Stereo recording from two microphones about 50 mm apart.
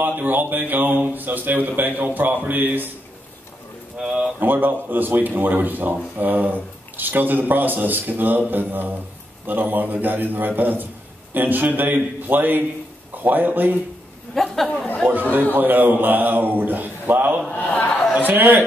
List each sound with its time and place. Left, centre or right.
0.0 s a man's voice: right
4.0 s speech: centre
4.4 s a man's voice: right
14.3 s a sound: centre
15.5 s a man's voice: right
17.5 s a man's voice: left
18.2 s a man's voice: right